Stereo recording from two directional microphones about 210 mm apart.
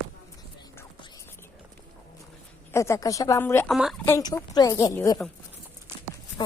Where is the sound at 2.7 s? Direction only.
15° left (ahead or behind).